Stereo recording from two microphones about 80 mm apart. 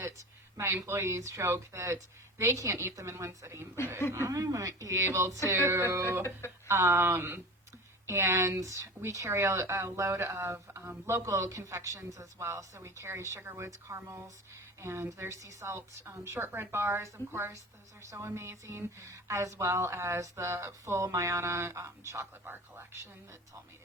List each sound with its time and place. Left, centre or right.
0.0 s speech: right